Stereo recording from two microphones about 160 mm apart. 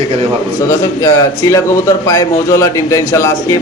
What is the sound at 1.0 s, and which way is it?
A man's voice, 20° left (ahead or behind).